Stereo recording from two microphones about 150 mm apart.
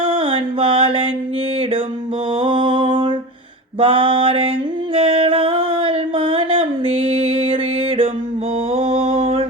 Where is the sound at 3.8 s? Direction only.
35° right (ahead or behind).